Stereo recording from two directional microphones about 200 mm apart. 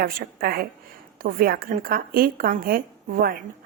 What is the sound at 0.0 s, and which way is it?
A woman's voice, 45° right (ahead or behind).